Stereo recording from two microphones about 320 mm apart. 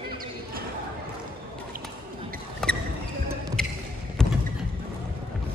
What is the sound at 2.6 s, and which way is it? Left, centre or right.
Music, centre.